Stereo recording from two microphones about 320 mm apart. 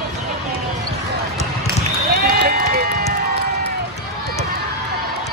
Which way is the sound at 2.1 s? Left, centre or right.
Right.